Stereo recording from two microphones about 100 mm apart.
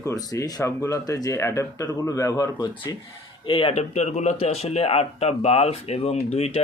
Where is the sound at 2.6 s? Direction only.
55° left (ahead or behind).